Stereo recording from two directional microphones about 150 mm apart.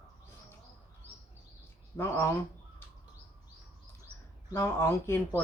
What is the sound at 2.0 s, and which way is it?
Speech, 15° left (ahead or behind).